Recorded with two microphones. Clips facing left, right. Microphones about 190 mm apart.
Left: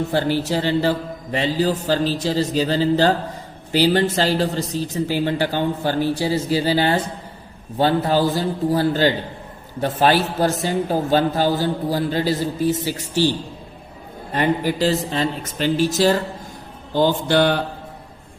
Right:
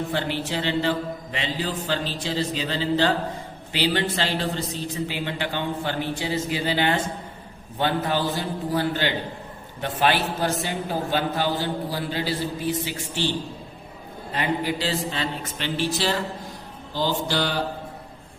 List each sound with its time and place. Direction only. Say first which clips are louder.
0.1 s a man's voice: left 7 dB; 40° left (ahead or behind)
14.3 s a woman's voice: left 6 dB; 45° left (ahead or behind)
16.9 s mantra: left 8 dB; 55° left (ahead or behind)